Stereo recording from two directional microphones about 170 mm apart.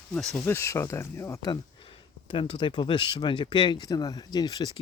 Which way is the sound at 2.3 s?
30° left (ahead or behind).